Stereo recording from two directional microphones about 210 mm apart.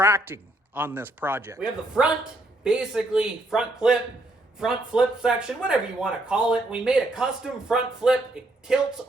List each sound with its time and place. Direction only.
0.0 s speech: 10° right (ahead or behind)